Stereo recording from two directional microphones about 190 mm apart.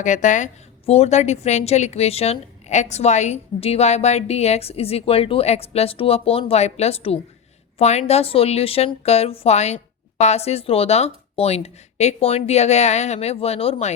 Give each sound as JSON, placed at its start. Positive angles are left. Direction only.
{"t": 0.0, "sound": "a woman's voice", "side_deg": 40}